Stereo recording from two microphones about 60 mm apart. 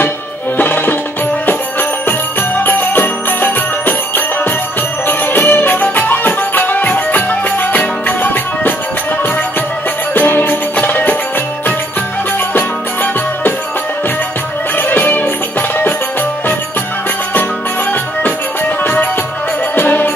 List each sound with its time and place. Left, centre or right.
0.6 s music: left
10.1 s music: left
12.5 s music: left
14.8 s music: left
19.7 s music: left